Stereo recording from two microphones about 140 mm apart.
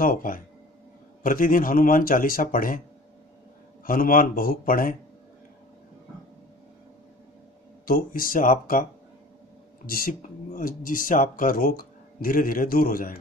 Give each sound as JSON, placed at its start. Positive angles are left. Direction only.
{"t": 0.0, "sound": "speech", "side_deg": 80}
{"t": 3.8, "sound": "speech", "side_deg": 90}
{"t": 7.8, "sound": "speech", "side_deg": 90}
{"t": 9.8, "sound": "speech", "side_deg": 90}